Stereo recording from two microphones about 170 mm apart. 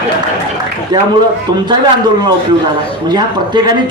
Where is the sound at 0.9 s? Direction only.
25° right (ahead or behind).